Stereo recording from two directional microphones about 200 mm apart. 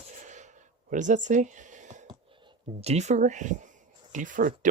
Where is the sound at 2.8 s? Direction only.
35° right (ahead or behind).